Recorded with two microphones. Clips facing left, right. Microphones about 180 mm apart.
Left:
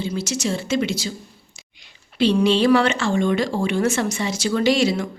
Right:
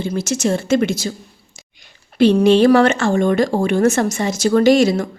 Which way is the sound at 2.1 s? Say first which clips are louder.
Right 6 dB; 50° right (ahead or behind).